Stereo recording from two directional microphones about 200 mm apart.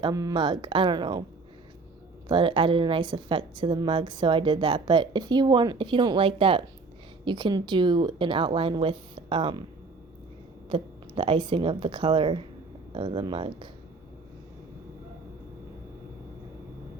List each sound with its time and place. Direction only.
0.0 s a woman's voice: 15° right (ahead or behind)
2.2 s a woman's voice: 25° right (ahead or behind)
10.7 s a woman's voice: 25° right (ahead or behind)